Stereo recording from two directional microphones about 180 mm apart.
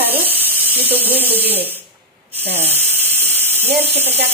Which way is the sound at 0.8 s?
10° right (ahead or behind).